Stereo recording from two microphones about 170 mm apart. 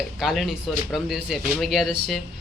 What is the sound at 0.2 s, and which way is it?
A man's voice, centre (ahead or behind).